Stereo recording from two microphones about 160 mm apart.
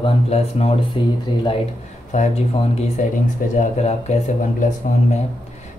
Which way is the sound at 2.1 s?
50° left (ahead or behind).